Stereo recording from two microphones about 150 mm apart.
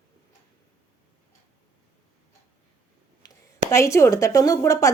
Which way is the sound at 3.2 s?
25° left (ahead or behind).